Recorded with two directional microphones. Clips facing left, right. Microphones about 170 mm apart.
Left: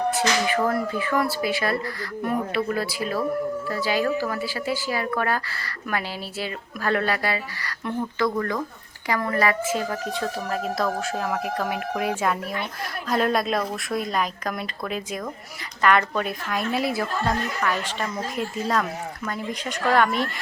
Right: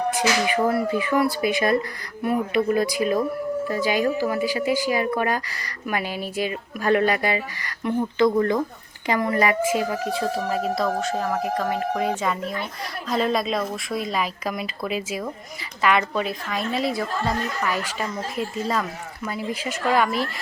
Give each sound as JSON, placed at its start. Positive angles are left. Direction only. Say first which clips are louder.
{"t": 0.1, "sound": "a woman's voice", "louder": "right 1 dB", "side_deg": -15}